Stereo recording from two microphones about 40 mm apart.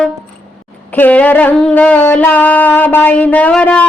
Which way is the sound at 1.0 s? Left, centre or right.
Left.